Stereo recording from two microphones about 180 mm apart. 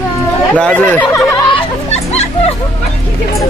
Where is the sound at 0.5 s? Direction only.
5° left (ahead or behind).